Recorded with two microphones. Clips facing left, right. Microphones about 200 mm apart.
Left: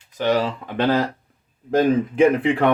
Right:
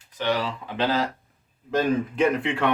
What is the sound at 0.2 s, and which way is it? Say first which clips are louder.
Speech: left 5 dB; 45° left (ahead or behind).